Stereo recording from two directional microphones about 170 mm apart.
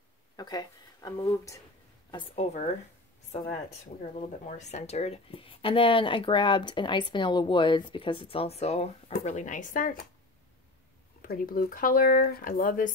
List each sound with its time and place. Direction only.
0.4 s speech: 25° left (ahead or behind)
2.3 s speech: 40° left (ahead or behind)
4.0 s speech: 40° left (ahead or behind)
11.2 s speech: 55° left (ahead or behind)